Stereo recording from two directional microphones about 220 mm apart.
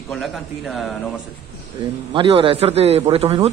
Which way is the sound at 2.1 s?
25° right (ahead or behind).